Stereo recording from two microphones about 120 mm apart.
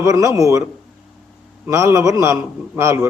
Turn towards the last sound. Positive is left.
turn(degrees=-20)  # may be behind; listen again after turning